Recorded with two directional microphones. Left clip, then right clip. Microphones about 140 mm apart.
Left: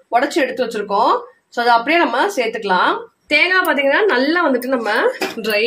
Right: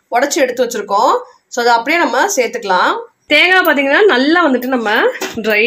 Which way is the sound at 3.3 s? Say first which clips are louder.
Right 5 dB; 55° right (ahead or behind).